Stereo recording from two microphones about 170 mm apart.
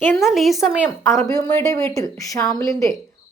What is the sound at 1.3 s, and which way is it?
Speech, 20° left (ahead or behind).